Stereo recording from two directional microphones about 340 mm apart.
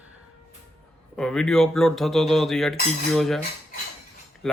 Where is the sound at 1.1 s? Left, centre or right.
Centre.